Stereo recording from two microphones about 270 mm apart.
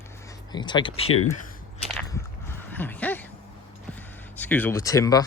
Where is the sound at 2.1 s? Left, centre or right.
Centre.